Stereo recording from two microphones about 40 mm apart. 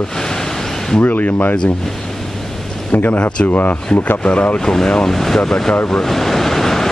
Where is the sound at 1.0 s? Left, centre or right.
Left.